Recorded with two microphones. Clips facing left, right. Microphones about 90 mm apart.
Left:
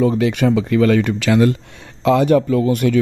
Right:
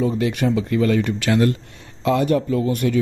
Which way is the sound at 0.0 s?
80° left.